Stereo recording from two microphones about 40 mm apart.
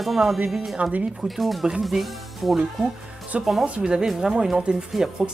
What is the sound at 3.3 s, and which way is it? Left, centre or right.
Speech, right.